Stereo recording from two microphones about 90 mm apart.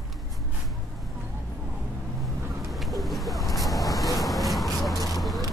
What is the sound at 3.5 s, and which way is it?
Vehicle, centre (ahead or behind).